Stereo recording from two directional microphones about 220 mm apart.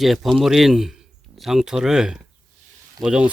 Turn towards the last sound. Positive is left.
turn(degrees=-5)  # may be behind; listen again after turning